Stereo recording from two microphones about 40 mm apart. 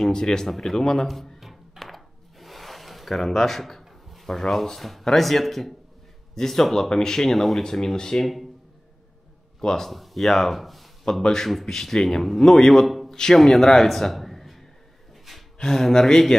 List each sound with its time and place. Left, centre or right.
0.0 s a man's voice: centre
1.4 s a sound: centre
5.0 s a man's voice: centre
7.6 s a man's voice: centre
8.2 s speech: centre
9.6 s a man's voice: centre
13.1 s a man's voice: centre
13.7 s a sound: centre
15.6 s a man's voice: centre